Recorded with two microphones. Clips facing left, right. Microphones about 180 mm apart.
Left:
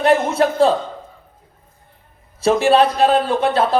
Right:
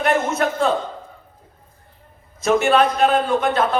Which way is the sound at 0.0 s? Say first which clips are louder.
Left 4 dB; 30° left (ahead or behind).